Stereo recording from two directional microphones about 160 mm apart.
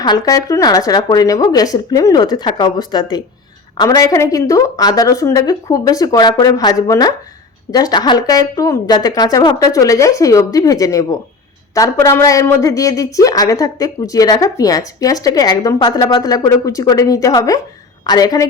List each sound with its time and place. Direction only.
0.0 s a woman's voice: 25° left (ahead or behind)